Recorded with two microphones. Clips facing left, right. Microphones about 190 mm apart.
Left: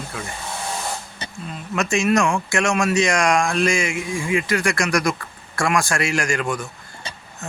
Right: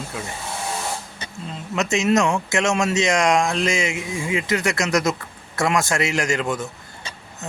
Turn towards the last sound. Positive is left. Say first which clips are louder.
# right 1 dB
turn(degrees=-20)  # may be behind; listen again after turning